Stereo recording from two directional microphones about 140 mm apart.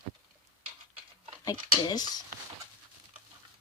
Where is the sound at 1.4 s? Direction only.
30° left (ahead or behind).